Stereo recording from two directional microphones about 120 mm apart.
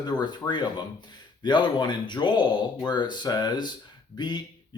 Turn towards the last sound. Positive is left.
turn(degrees=35)  # may be behind; listen again after turning